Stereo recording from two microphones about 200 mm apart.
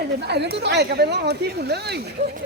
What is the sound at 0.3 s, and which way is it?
Speech, 55° right (ahead or behind).